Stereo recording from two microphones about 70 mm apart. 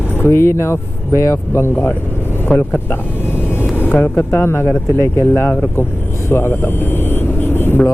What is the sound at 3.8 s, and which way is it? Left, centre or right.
Music, left.